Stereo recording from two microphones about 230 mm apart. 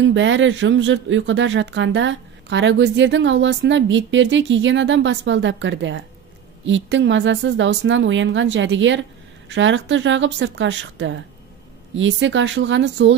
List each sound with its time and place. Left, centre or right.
0.1 s speech: right